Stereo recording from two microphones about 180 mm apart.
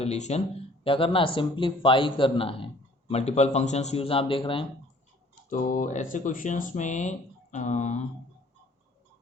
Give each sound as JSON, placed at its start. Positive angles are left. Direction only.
{"t": 0.0, "sound": "a man's voice", "side_deg": 35}
{"t": 5.5, "sound": "speech", "side_deg": 50}